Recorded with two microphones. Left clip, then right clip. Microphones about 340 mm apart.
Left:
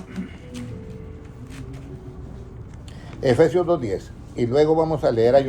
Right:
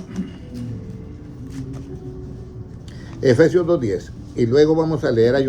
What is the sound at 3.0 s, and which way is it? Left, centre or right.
Speech, centre.